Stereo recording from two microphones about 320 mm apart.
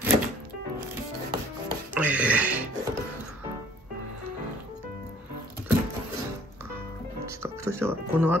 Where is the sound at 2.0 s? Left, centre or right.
Centre.